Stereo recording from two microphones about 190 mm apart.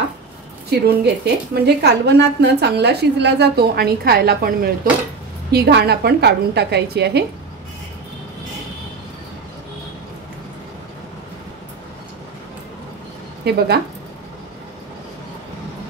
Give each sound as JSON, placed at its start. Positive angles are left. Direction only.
{"t": 0.7, "sound": "a woman's voice", "side_deg": -60}
{"t": 13.5, "sound": "a woman's voice", "side_deg": -60}